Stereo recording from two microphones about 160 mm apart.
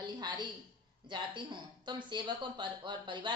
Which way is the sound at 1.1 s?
30° right (ahead or behind).